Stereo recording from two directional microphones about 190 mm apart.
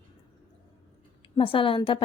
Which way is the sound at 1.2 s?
25° left (ahead or behind).